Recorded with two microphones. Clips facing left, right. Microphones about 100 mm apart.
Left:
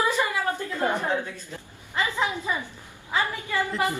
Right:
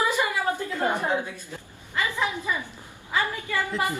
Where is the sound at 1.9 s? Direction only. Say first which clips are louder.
Left 1 dB; 20° left (ahead or behind).